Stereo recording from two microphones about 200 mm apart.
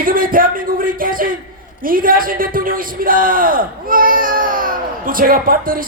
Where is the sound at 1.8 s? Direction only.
45° right (ahead or behind).